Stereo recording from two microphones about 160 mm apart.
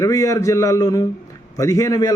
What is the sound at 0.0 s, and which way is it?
A man's voice, 20° left (ahead or behind).